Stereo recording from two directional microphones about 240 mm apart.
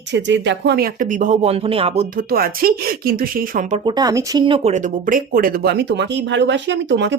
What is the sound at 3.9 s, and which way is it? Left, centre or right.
Speech, centre.